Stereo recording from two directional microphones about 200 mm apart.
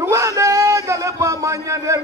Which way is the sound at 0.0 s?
15° right (ahead or behind).